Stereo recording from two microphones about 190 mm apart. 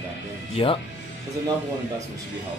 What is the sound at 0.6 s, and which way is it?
Speech, 30° left (ahead or behind).